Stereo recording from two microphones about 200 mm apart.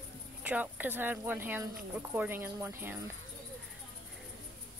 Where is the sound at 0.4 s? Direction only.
5° right (ahead or behind).